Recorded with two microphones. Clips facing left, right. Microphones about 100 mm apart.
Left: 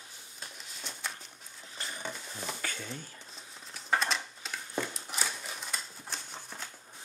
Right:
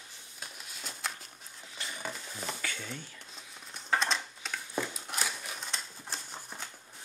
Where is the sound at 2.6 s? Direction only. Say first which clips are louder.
Even; 35° left (ahead or behind).